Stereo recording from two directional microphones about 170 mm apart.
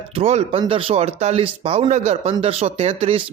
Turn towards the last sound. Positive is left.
turn(degrees=-40)  # may be behind; listen again after turning